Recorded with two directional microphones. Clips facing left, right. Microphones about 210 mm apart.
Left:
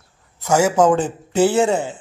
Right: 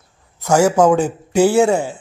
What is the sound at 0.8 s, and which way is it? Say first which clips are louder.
A man's voice: right 2 dB; 10° right (ahead or behind).